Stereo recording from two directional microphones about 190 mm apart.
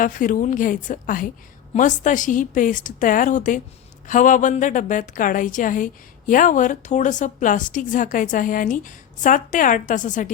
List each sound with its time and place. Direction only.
0.0 s a woman's voice: 45° left (ahead or behind)